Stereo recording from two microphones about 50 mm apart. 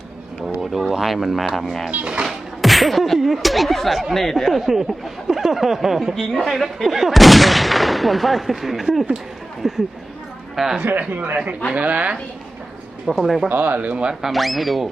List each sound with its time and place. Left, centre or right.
0.4 s a woman's voice: centre
11.7 s speech: right
13.1 s speech: centre
13.7 s speech: right; by 14.3 s centre
14.3 s speech: centre